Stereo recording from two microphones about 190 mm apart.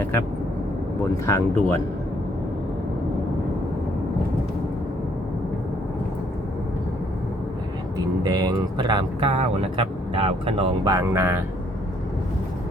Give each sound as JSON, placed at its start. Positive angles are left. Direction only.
{"t": 1.3, "sound": "speech", "side_deg": 10}
{"t": 7.9, "sound": "speech", "side_deg": -20}
{"t": 10.9, "sound": "speech", "side_deg": -15}